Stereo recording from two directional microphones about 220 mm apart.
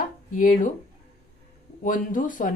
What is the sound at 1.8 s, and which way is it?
Speech, 35° left (ahead or behind).